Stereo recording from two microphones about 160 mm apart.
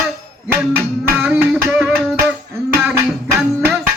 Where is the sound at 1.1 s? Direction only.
15° right (ahead or behind).